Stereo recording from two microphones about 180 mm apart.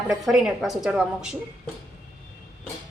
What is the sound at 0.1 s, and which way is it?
A woman's voice, 5° right (ahead or behind).